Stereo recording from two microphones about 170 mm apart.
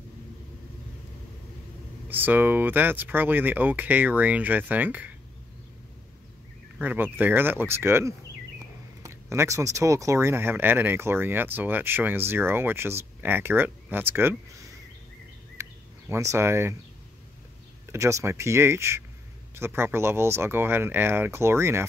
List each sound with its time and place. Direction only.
2.0 s speech: 10° right (ahead or behind)
6.8 s speech: 10° right (ahead or behind)
15.6 s a sound: 15° right (ahead or behind)
16.1 s speech: 15° right (ahead or behind)
17.9 s speech: 15° right (ahead or behind)